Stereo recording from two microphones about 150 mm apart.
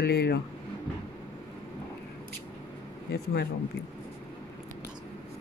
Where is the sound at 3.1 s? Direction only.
90° left.